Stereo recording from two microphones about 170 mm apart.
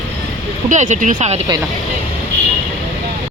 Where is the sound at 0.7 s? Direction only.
45° right (ahead or behind).